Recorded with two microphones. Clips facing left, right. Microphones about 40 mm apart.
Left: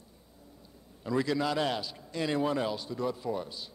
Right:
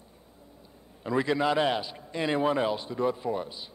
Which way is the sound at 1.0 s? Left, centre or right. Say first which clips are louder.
Right 3 dB; right.